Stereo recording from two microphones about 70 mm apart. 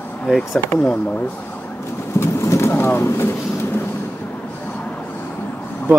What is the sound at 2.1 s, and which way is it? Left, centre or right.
Bird, left.